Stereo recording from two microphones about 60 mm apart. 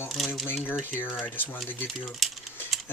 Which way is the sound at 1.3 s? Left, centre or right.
Left.